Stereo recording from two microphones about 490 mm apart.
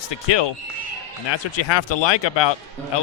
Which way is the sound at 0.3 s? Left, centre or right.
Left.